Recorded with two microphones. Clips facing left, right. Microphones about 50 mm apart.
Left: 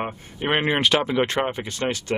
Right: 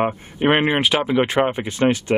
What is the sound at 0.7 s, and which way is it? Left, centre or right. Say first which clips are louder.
Speech: right 2 dB; centre.